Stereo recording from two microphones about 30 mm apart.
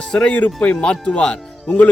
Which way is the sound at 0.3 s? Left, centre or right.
Left.